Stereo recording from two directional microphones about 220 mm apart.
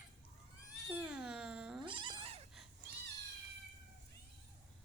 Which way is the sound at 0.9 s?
5° right (ahead or behind).